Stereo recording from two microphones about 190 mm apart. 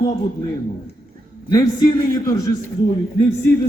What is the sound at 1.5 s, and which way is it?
Speech, 20° left (ahead or behind).